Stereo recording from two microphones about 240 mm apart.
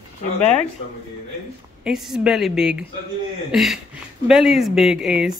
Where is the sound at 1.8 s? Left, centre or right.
Centre.